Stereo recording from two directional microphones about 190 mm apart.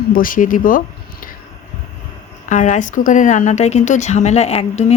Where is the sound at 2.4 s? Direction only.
40° left (ahead or behind).